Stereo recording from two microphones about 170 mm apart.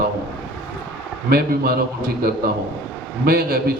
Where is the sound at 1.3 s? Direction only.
65° right (ahead or behind).